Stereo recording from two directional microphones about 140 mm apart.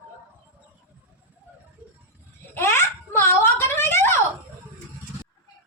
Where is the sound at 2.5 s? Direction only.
15° left (ahead or behind).